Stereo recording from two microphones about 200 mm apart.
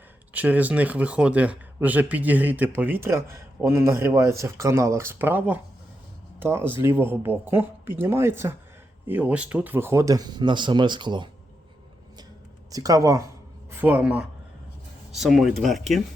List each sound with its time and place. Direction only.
0.3 s speech: 10° right (ahead or behind); by 11.3 s 25° right (ahead or behind)
12.7 s speech: 15° right (ahead or behind); by 16.0 s centre (ahead or behind)